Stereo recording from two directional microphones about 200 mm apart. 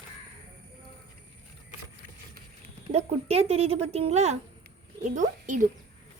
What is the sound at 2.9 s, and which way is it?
A woman's voice, 30° right (ahead or behind).